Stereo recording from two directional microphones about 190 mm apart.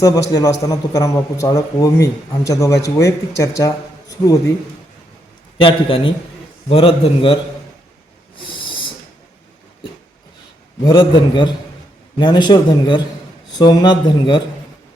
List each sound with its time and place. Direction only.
0.0 s a man's voice: 20° left (ahead or behind)
5.5 s speech: 30° left (ahead or behind)
8.4 s a sound: 25° left (ahead or behind)
10.8 s speech: 25° left (ahead or behind)